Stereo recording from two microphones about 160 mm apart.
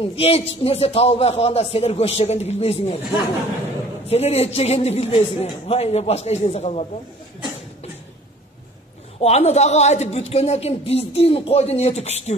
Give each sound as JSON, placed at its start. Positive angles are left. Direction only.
{"t": 0.0, "sound": "speech", "side_deg": 40}
{"t": 4.1, "sound": "speech", "side_deg": 40}
{"t": 9.2, "sound": "speech", "side_deg": 40}